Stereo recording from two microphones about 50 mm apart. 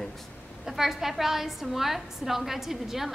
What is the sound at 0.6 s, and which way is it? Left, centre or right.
A woman's voice, centre.